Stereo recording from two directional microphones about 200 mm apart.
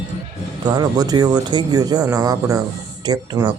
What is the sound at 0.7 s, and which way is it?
Speech, 20° right (ahead or behind).